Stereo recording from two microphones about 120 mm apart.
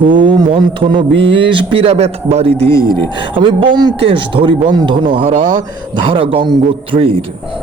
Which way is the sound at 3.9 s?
50° right (ahead or behind).